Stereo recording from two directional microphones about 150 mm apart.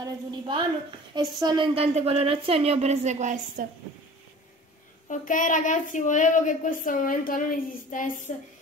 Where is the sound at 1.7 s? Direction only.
40° right (ahead or behind).